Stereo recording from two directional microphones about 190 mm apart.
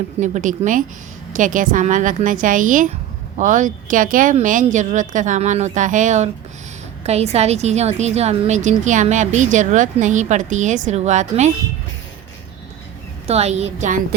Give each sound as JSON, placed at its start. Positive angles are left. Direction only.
{"t": 0.2, "sound": "a woman's voice", "side_deg": -40}
{"t": 13.2, "sound": "a woman's voice", "side_deg": -35}